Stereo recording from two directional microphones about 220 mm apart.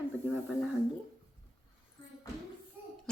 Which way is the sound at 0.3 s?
5° right (ahead or behind).